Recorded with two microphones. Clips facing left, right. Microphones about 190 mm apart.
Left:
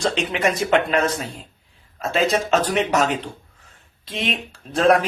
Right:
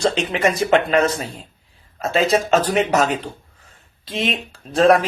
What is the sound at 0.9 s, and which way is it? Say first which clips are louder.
Speech: right 3 dB; centre (ahead or behind).